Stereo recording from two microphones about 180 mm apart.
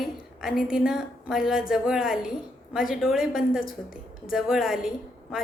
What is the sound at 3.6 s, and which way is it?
Speech, 50° left (ahead or behind).